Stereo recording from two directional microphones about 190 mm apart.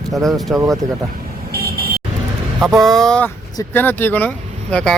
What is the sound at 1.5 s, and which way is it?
Vehicle, 50° right (ahead or behind).